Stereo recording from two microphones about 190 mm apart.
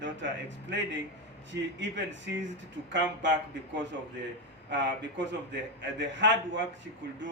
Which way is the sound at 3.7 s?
70° right (ahead or behind).